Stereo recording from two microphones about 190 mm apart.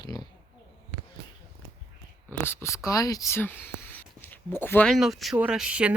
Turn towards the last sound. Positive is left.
turn(degrees=-5)  # may be behind; listen again after turning